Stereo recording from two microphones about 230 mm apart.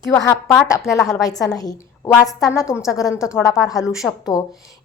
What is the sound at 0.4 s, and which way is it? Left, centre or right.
A woman's voice, centre.